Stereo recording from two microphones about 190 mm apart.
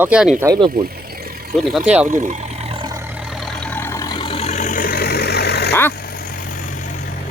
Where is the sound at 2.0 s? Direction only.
40° right (ahead or behind); by 6.8 s 45° left (ahead or behind).